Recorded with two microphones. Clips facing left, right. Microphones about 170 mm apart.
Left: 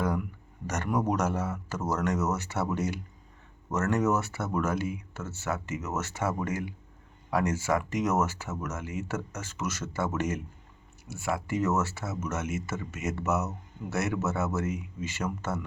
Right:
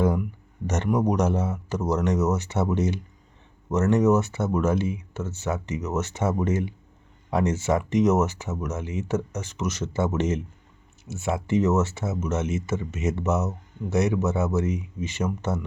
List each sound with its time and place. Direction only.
0.7 s speech: 20° right (ahead or behind)